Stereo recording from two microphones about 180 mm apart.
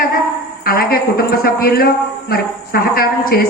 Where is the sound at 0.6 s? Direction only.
55° left (ahead or behind).